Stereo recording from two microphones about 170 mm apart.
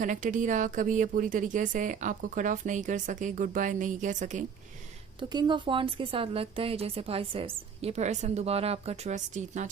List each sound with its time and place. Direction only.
0.0 s a woman's voice: 50° right (ahead or behind)
5.3 s a woman's voice: 25° right (ahead or behind); by 9.6 s 45° right (ahead or behind)